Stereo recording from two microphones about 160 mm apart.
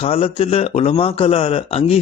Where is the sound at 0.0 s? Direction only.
40° left (ahead or behind).